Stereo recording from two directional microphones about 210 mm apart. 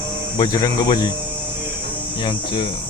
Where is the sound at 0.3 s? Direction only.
20° left (ahead or behind).